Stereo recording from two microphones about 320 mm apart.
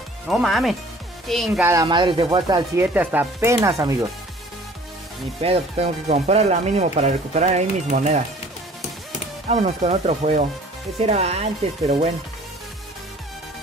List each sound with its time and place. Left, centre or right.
0.3 s speech: centre
5.4 s speech: centre
9.5 s speech: right